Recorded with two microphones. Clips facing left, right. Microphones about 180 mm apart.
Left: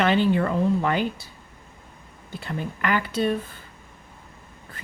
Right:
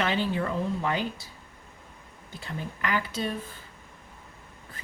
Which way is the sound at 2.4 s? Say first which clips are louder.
Left 5 dB; 60° left (ahead or behind).